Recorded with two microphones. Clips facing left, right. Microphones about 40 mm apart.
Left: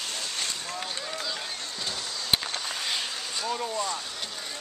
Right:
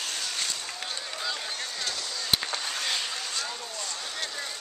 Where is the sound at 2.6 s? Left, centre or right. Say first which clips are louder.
Even; centre.